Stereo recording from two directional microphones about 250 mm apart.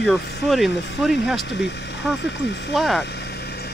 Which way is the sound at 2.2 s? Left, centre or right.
Left.